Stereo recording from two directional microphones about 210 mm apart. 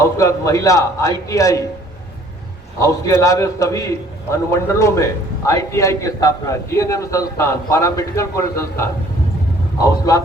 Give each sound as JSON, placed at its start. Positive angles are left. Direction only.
{"t": 0.0, "sound": "a man's voice", "side_deg": 15}
{"t": 2.7, "sound": "a man's voice", "side_deg": 15}